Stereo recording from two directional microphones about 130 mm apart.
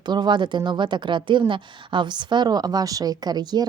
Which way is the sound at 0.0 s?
35° right (ahead or behind).